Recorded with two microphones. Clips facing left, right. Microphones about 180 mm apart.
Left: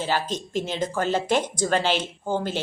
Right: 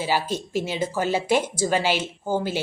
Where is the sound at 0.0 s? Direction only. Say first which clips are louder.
Right 1 dB; 10° right (ahead or behind).